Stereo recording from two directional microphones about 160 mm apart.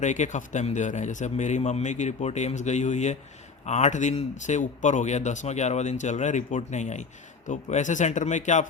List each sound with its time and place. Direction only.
0.0 s speech: 50° left (ahead or behind)